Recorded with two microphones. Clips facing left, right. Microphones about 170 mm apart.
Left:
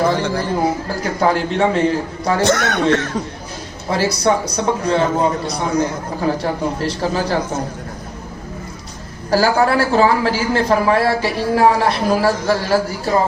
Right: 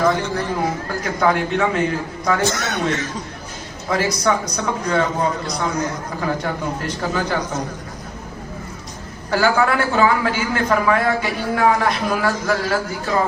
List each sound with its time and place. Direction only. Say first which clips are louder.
0.0 s a man's voice: left 2 dB; 30° left (ahead or behind)
2.4 s speech: left 5 dB; 65° left (ahead or behind)
3.8 s a man's voice: left 3 dB; 30° left (ahead or behind)
6.2 s a man's voice: left 4 dB; 35° left (ahead or behind)
9.3 s a man's voice: left 3 dB; 35° left (ahead or behind)